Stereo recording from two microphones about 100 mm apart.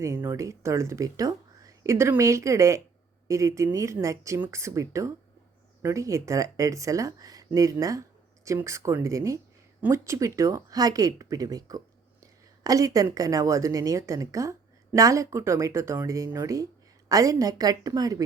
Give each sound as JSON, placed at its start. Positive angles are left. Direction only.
{"t": 0.3, "sound": "speech", "side_deg": -30}